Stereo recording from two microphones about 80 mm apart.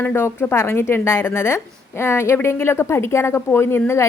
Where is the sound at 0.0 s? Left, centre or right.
Left.